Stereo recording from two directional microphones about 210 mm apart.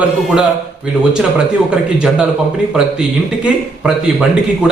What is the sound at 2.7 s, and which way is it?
Speech, 5° right (ahead or behind).